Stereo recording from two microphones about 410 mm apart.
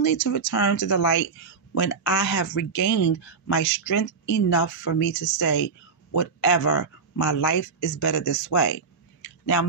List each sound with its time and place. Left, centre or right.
0.0 s speech: left